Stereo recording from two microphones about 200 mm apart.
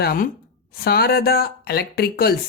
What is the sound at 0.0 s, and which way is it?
Speech, 50° left (ahead or behind).